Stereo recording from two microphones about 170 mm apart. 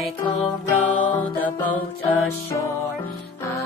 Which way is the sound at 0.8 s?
10° left (ahead or behind).